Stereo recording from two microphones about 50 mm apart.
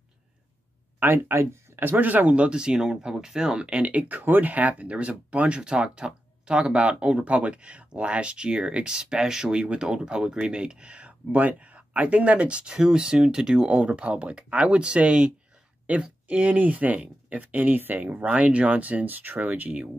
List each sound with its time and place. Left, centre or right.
0.9 s speech: right
1.3 s speech: right
1.8 s speech: right; by 3.6 s centre
3.6 s speech: right
4.2 s speech: right